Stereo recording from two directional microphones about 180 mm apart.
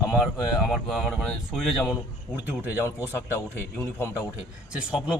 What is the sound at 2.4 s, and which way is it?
Speech, 10° right (ahead or behind).